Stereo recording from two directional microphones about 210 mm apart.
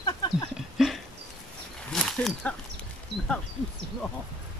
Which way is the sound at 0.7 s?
Centre (ahead or behind).